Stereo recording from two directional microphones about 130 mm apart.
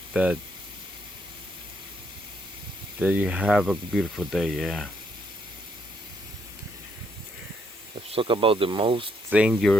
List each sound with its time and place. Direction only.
0.1 s speech: 5° right (ahead or behind)
3.0 s speech: 10° right (ahead or behind)
8.1 s speech: 45° right (ahead or behind)
9.3 s speech: 10° right (ahead or behind)